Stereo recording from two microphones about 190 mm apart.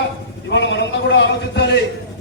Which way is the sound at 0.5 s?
70° left (ahead or behind).